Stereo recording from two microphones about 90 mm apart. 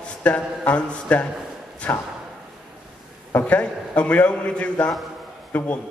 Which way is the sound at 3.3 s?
20° left (ahead or behind).